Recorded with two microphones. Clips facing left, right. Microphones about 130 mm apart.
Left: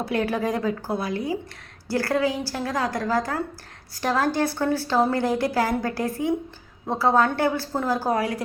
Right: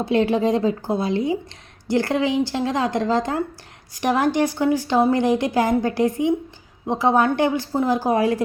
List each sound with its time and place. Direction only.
0.0 s a woman's voice: 25° right (ahead or behind)